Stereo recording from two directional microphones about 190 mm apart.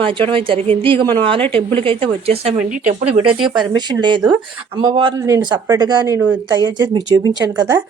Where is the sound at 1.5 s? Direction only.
30° right (ahead or behind).